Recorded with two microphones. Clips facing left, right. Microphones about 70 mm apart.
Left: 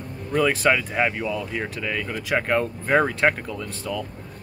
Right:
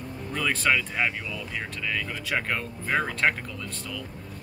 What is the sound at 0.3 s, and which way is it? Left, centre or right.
Speech, centre.